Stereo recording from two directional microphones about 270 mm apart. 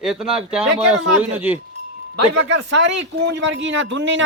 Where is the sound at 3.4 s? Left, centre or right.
Right.